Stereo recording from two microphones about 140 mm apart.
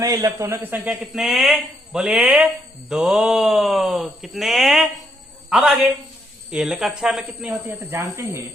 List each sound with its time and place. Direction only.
0.0 s a man's voice: 25° right (ahead or behind)
1.1 s a man's voice: centre (ahead or behind)
7.9 s speech: 20° right (ahead or behind)